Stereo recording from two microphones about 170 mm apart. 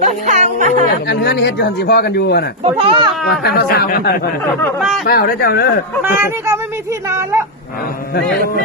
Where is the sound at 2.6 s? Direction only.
30° right (ahead or behind).